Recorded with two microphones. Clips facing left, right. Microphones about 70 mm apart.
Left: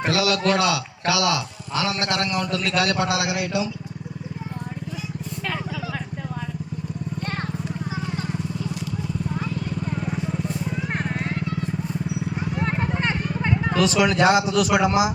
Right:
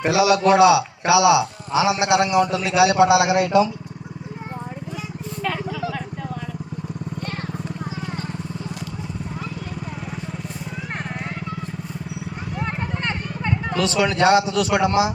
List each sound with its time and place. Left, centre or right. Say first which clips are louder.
0.0 s a man's voice: right 5 dB; centre
3.3 s a man's voice: right 8 dB; right
10.9 s vehicle: left 3 dB; centre
12.5 s vehicle: left 1 dB; centre